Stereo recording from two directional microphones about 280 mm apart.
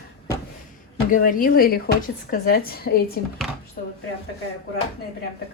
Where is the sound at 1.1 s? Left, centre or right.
Left.